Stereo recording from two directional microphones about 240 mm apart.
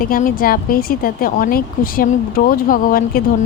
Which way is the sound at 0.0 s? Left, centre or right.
Left.